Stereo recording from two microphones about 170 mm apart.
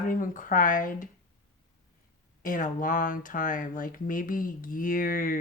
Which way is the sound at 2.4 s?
55° left (ahead or behind).